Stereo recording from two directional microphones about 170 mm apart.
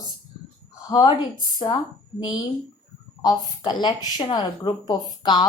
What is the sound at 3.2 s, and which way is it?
Speech, 25° left (ahead or behind).